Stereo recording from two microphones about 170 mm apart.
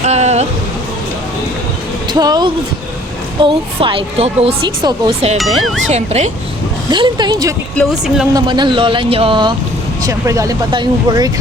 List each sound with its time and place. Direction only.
0.0 s a sound: 40° right (ahead or behind)
2.1 s a woman's voice: 25° right (ahead or behind)
5.4 s speech: centre (ahead or behind)
5.9 s a woman's voice: 40° right (ahead or behind)
6.9 s speech: 25° right (ahead or behind)
7.8 s speech: centre (ahead or behind)
8.3 s speech: 25° right (ahead or behind)